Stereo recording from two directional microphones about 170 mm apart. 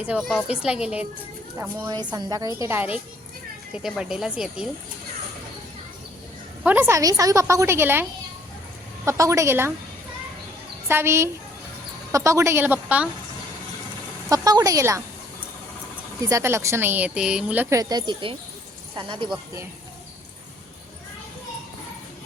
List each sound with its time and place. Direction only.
0.0 s a woman's voice: 5° right (ahead or behind)
2.1 s a woman's voice: 25° right (ahead or behind); by 4.7 s 5° right (ahead or behind)
6.6 s speech: 10° right (ahead or behind)
9.0 s speech: 20° right (ahead or behind)
10.8 s speech: 15° right (ahead or behind)
14.3 s a woman's voice: 20° right (ahead or behind)
16.2 s a woman's voice: 15° right (ahead or behind)